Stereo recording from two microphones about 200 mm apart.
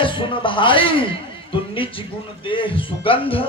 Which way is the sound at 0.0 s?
25° left (ahead or behind).